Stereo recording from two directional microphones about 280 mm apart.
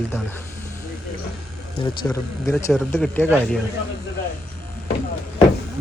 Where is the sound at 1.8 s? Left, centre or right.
Centre.